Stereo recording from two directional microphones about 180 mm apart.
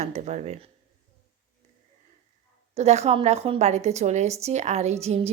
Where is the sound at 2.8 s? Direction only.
35° right (ahead or behind).